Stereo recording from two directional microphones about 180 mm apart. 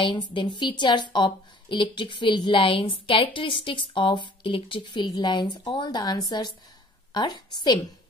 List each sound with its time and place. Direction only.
0.0 s a woman's voice: 25° left (ahead or behind)